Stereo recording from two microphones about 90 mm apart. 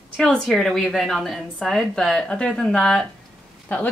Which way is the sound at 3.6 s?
15° left (ahead or behind).